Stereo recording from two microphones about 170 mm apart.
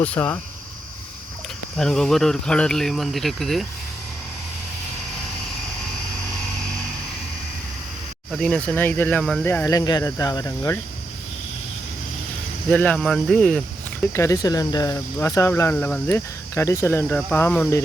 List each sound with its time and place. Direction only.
0.0 s speech: 10° left (ahead or behind)
1.7 s speech: 5° left (ahead or behind)
8.3 s speech: 5° left (ahead or behind)
12.7 s speech: 10° left (ahead or behind)
14.1 s speech: 20° left (ahead or behind)